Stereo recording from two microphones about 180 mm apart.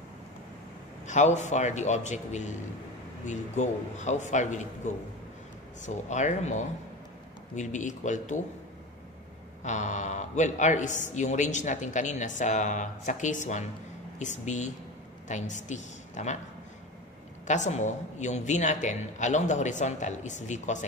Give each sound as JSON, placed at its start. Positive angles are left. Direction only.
{"t": 1.0, "sound": "a man's voice", "side_deg": 40}
{"t": 9.6, "sound": "a man's voice", "side_deg": 40}
{"t": 17.5, "sound": "a man's voice", "side_deg": 40}